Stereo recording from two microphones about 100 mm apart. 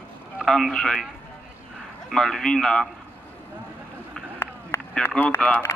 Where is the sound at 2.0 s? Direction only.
5° left (ahead or behind).